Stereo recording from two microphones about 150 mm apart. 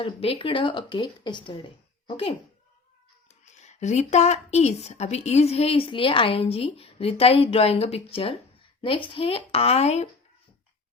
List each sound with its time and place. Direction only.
0.0 s a woman's voice: 35° left (ahead or behind)
3.2 s a woman's voice: 50° left (ahead or behind)